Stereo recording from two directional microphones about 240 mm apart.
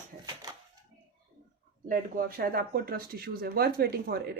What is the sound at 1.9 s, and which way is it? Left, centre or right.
Speech, right.